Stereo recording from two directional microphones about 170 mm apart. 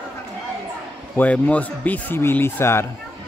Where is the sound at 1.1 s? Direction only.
10° left (ahead or behind).